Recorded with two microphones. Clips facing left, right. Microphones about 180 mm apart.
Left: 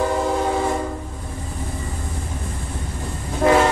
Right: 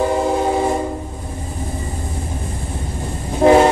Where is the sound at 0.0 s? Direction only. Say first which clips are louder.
Right 3 dB; 25° right (ahead or behind).